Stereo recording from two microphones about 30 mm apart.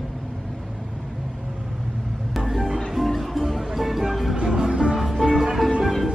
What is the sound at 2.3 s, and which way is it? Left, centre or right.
Music, centre.